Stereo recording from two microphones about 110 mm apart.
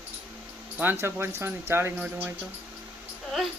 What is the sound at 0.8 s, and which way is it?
Speech, 20° right (ahead or behind).